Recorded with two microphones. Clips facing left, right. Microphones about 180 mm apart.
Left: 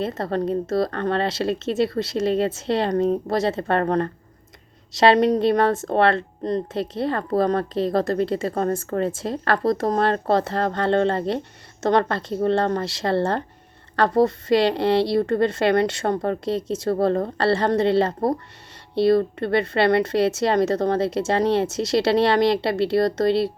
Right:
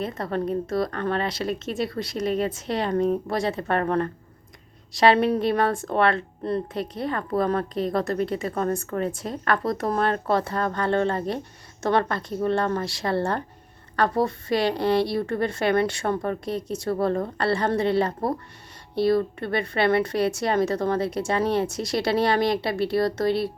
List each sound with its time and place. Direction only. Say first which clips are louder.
0.2 s a woman's voice: left 3 dB; 30° left (ahead or behind)
5.4 s a woman's voice: left 4 dB; 25° left (ahead or behind)
10.4 s speech: left 3 dB; 65° left (ahead or behind)
10.8 s a woman's voice: left 4 dB; 25° left (ahead or behind)
14.5 s a woman's voice: left 2 dB; 25° left (ahead or behind)
16.4 s a woman's voice: left 4 dB; 25° left (ahead or behind)